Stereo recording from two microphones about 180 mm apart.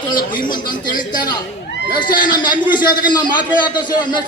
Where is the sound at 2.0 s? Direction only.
25° left (ahead or behind).